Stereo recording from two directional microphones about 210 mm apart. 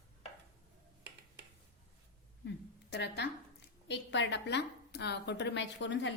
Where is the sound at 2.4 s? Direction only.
55° left (ahead or behind).